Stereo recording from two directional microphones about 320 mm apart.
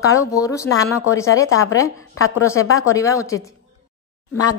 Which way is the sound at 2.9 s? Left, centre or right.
Centre.